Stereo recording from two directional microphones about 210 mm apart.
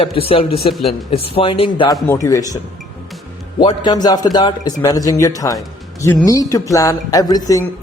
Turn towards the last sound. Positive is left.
turn(degrees=15)  # may be behind; listen again after turning